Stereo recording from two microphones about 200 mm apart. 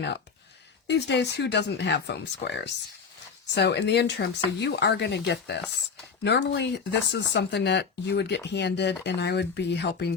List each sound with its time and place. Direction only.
0.9 s speech: 60° left (ahead or behind)